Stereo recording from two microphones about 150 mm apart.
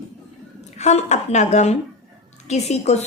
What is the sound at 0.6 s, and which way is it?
A woman's voice, 50° left (ahead or behind).